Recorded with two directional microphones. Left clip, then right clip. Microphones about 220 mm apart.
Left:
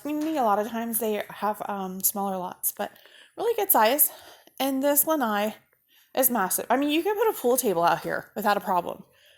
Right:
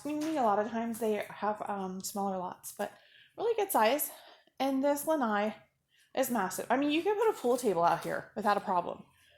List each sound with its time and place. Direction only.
0.0 s speech: 40° left (ahead or behind)